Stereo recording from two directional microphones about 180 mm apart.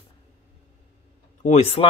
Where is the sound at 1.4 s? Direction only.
40° left (ahead or behind).